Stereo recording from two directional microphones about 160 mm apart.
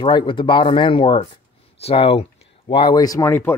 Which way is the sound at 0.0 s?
30° left (ahead or behind).